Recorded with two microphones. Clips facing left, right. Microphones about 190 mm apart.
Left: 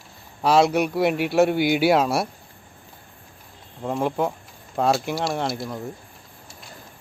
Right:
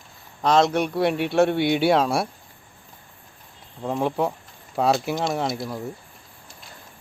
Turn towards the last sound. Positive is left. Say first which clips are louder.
# even
turn(degrees=0)  # may be behind; listen again after turning